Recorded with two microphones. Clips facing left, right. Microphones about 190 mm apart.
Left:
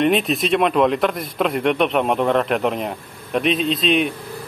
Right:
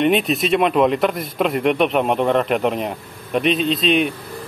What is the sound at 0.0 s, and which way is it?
Speech, centre (ahead or behind).